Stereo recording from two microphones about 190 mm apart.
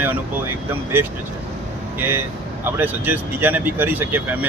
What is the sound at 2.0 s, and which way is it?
Speech, 10° right (ahead or behind).